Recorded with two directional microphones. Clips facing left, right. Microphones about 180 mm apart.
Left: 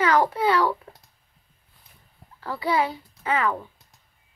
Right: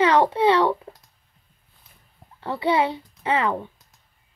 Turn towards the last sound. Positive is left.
turn(degrees=-25)  # may be behind; listen again after turning